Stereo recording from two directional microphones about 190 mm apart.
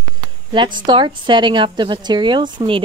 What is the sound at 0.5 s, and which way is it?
Speech, 25° right (ahead or behind).